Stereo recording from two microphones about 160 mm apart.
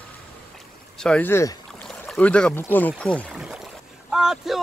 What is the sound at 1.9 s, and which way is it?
Speech, 5° left (ahead or behind).